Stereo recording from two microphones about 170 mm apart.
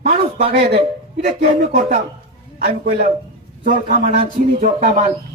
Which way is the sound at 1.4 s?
65° right (ahead or behind).